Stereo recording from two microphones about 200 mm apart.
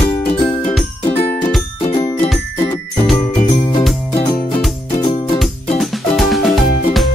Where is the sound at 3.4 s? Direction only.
30° left (ahead or behind).